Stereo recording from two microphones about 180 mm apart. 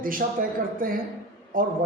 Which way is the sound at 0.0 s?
50° right (ahead or behind).